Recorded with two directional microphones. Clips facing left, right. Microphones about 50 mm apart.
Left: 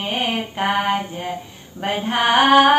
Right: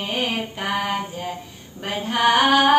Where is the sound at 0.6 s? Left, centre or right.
Left.